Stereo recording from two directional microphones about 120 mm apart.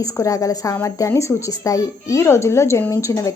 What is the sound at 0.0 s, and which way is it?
A woman's voice, 25° left (ahead or behind).